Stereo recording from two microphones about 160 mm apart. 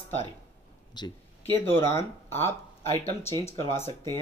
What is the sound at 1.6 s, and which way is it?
Speech, 15° left (ahead or behind).